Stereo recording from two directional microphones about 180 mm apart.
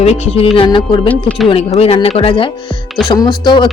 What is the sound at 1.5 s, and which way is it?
Speech, 35° left (ahead or behind).